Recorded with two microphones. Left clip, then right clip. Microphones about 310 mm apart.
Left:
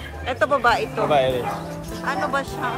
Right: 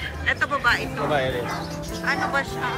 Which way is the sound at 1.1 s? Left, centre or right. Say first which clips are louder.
Left 5 dB; left.